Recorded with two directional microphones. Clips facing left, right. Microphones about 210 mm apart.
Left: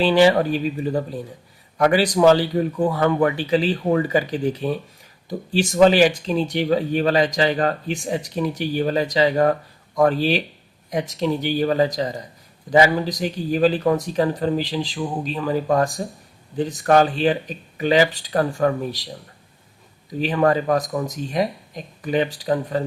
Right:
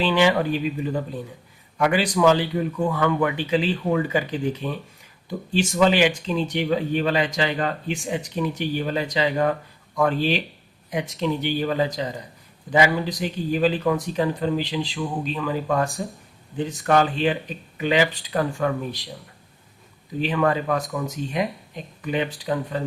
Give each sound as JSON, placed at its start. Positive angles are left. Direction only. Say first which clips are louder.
{"t": 0.0, "sound": "speech", "louder": "left 4 dB", "side_deg": 40}
{"t": 20.2, "sound": "speech", "louder": "left 3 dB", "side_deg": 40}